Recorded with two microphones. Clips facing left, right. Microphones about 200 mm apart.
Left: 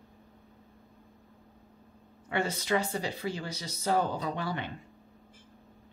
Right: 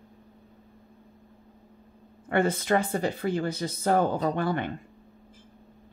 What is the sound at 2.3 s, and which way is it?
Speech, 55° right (ahead or behind).